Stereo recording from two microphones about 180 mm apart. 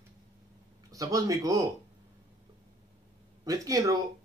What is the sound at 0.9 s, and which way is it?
Speech, 20° right (ahead or behind).